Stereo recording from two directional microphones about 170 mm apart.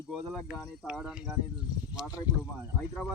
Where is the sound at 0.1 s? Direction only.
Centre (ahead or behind).